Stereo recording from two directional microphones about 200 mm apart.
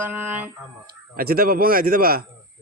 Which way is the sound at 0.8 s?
50° right (ahead or behind).